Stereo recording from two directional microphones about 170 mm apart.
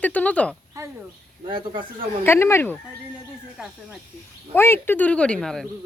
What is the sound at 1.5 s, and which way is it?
Speech, 30° right (ahead or behind).